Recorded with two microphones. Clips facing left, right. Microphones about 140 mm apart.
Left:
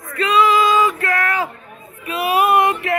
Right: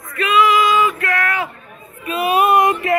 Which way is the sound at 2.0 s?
10° left (ahead or behind).